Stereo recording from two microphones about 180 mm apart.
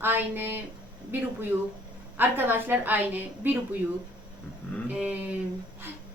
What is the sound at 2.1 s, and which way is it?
A woman's voice, 10° right (ahead or behind).